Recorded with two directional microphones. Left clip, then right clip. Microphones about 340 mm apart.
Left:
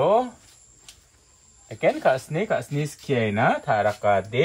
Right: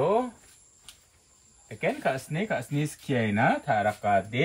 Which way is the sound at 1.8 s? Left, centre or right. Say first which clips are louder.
Left 7 dB; centre.